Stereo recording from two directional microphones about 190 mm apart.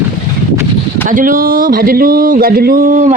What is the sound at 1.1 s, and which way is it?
Speech, 45° right (ahead or behind).